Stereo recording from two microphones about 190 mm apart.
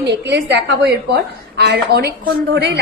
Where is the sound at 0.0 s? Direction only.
65° right (ahead or behind).